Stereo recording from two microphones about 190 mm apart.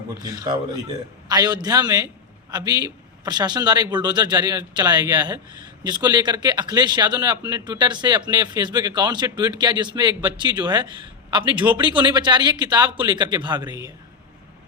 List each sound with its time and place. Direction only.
0.3 s a man's voice: 20° right (ahead or behind)
11.5 s a man's voice: 10° right (ahead or behind)
11.8 s a man's voice: 25° right (ahead or behind)